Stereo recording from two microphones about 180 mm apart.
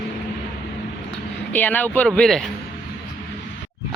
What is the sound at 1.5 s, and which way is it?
Speech, 10° left (ahead or behind).